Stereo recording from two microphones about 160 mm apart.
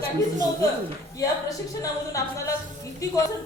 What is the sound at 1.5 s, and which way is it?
A woman's voice, 20° left (ahead or behind).